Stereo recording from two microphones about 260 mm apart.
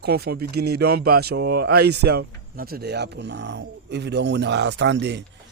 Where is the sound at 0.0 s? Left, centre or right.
Right.